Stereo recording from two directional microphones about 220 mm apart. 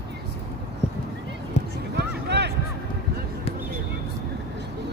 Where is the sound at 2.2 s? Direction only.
50° right (ahead or behind).